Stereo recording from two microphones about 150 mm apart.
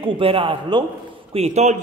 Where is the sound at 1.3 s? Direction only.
45° right (ahead or behind).